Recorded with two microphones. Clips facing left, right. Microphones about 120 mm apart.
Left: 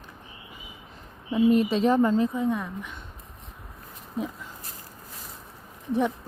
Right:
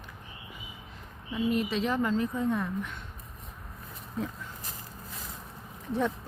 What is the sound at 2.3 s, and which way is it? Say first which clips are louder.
Speech: left 2 dB; 5° left (ahead or behind).